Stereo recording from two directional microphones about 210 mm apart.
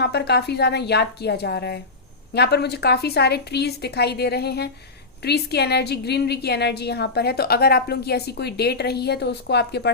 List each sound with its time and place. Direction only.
0.0 s a woman's voice: 55° left (ahead or behind)